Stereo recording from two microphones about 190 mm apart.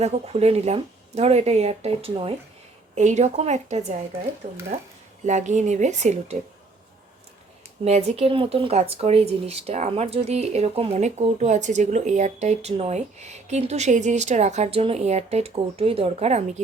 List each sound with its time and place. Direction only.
0.0 s speech: 35° right (ahead or behind)
7.9 s speech: 35° right (ahead or behind)